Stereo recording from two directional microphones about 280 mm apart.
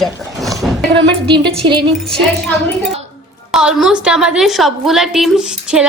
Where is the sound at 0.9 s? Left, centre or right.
Centre.